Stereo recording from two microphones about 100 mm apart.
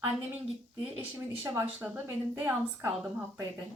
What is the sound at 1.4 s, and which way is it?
A woman's voice, 20° right (ahead or behind).